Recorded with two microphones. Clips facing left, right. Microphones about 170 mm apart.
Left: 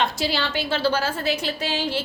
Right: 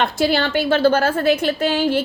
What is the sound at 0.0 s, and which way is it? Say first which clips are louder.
A woman's voice: right 6 dB; 55° right (ahead or behind).